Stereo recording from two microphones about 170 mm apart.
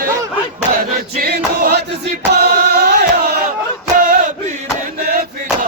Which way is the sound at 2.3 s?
70° right (ahead or behind).